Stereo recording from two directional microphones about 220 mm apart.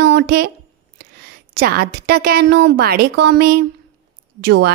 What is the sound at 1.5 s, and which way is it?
A woman's voice, 45° right (ahead or behind).